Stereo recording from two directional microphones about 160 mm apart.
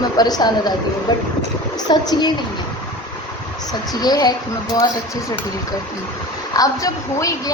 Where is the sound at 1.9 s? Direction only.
25° left (ahead or behind).